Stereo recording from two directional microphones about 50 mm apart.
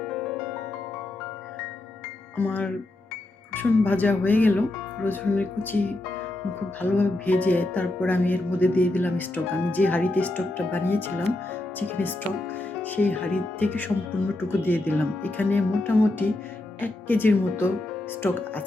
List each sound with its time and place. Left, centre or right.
0.0 s music: centre
2.3 s music: left
6.8 s music: left
10.7 s speech: left
11.8 s music: left
13.7 s music: left
16.8 s speech: left